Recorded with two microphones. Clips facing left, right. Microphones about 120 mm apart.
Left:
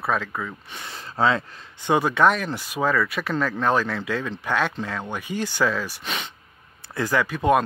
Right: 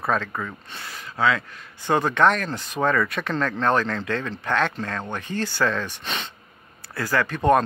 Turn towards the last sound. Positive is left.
turn(degrees=5)  # may be behind; listen again after turning